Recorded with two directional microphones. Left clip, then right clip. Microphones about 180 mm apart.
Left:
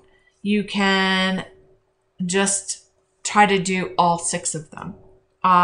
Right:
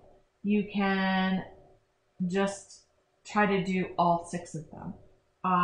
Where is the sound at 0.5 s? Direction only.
25° left (ahead or behind).